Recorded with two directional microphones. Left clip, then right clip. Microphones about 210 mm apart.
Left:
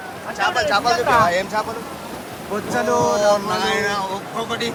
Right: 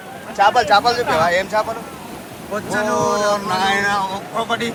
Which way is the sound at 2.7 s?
35° left (ahead or behind).